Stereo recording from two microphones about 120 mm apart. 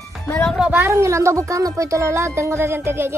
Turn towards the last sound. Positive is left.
turn(degrees=-20)  # may be behind; listen again after turning